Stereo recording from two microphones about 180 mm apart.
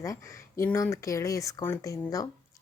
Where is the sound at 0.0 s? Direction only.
15° left (ahead or behind).